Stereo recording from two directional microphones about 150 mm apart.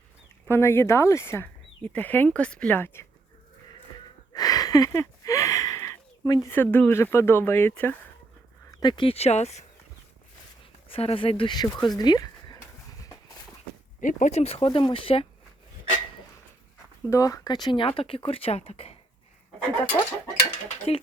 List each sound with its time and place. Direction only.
0.4 s speech: 15° left (ahead or behind)
4.4 s a sound: 25° left (ahead or behind)
6.5 s speech: 15° left (ahead or behind)
8.7 s speech: 30° left (ahead or behind); by 9.6 s 45° left (ahead or behind)
10.8 s a sound: 35° left (ahead or behind); by 13.3 s 20° left (ahead or behind)
14.0 s speech: 60° left (ahead or behind); by 15.3 s 35° left (ahead or behind)
17.1 s speech: 20° left (ahead or behind); by 18.9 s 45° left (ahead or behind)
19.9 s a sound: 25° left (ahead or behind)
20.7 s speech: 45° left (ahead or behind)